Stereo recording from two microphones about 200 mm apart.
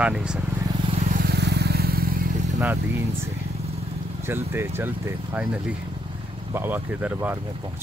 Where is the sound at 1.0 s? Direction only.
50° right (ahead or behind).